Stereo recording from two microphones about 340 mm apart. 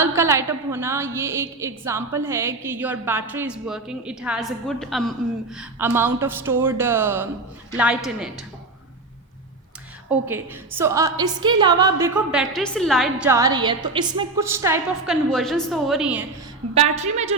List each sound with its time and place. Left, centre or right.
0.0 s a woman's voice: centre
10.2 s a woman's voice: centre
16.9 s a woman's voice: centre